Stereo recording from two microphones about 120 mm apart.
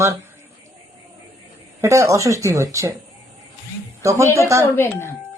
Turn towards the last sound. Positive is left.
turn(degrees=20)  # may be behind; listen again after turning